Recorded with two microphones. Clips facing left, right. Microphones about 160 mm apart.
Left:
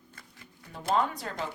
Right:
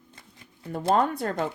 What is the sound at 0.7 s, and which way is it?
Speech, 55° right (ahead or behind).